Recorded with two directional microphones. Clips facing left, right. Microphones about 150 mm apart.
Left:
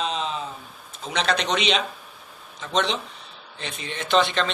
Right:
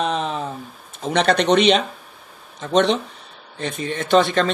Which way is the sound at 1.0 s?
55° right (ahead or behind).